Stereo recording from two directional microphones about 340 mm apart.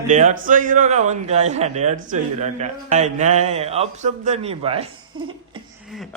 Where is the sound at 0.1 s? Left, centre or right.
Right.